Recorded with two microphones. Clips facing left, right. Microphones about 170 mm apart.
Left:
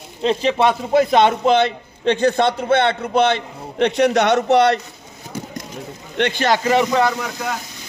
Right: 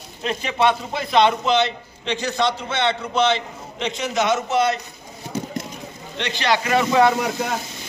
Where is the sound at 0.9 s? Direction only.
50° left (ahead or behind); by 4.7 s 65° left (ahead or behind).